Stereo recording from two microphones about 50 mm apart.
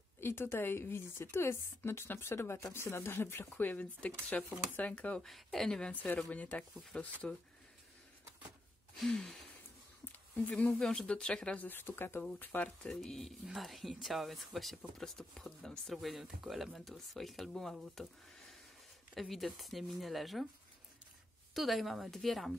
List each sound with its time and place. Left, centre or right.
0.2 s speech: left
3.6 s speech: left
5.2 s speech: centre
5.9 s speech: left
9.0 s speech: centre
10.3 s speech: left
10.8 s speech: centre
11.5 s speech: left
12.8 s speech: centre
15.9 s speech: centre
19.1 s speech: centre
21.5 s speech: centre